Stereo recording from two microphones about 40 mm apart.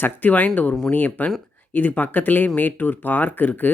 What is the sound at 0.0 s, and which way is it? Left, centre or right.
Speech, left.